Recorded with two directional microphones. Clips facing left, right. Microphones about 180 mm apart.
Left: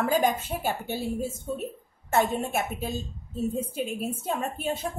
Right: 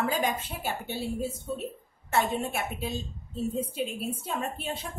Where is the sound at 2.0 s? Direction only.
45° left (ahead or behind).